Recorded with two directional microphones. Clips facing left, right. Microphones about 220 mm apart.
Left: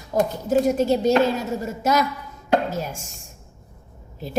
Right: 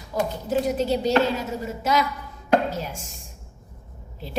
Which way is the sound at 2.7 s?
45° left (ahead or behind).